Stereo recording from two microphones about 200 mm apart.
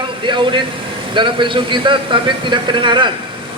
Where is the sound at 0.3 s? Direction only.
25° right (ahead or behind).